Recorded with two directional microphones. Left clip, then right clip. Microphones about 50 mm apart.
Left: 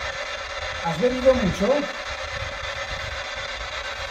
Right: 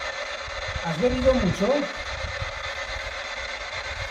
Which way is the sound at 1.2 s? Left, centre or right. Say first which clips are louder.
Left 4 dB; left.